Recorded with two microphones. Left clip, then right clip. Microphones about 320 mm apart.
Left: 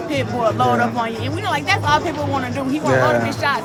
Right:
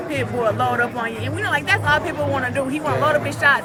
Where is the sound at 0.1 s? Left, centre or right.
Centre.